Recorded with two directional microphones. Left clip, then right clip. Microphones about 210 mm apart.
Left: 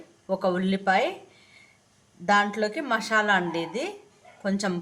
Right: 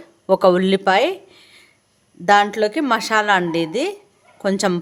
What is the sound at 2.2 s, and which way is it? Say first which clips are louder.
A woman's voice: right 8 dB; 55° right (ahead or behind).